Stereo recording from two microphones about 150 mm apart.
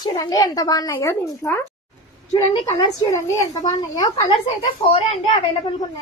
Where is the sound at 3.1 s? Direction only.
25° left (ahead or behind).